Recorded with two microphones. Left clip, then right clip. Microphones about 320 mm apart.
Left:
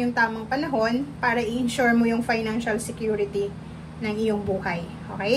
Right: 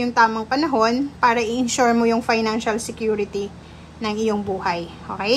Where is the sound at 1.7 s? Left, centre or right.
Centre.